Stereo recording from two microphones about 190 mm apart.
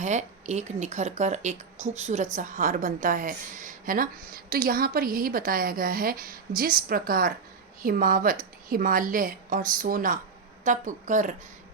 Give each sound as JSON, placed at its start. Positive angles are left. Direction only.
{"t": 0.0, "sound": "speech", "side_deg": -40}